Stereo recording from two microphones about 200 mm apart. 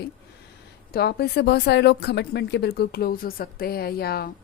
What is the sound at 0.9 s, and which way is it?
A woman's voice, 55° left (ahead or behind).